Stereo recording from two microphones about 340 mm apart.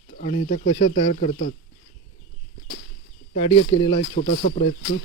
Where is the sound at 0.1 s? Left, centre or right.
Centre.